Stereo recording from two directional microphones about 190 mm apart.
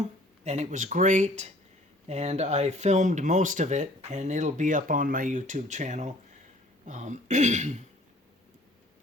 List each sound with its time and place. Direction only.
0.4 s speech: 35° right (ahead or behind)